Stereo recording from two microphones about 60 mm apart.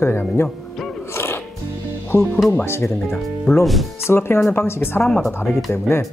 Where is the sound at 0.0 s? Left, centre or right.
Left.